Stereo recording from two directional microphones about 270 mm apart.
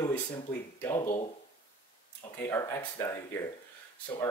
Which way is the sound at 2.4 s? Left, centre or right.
Centre.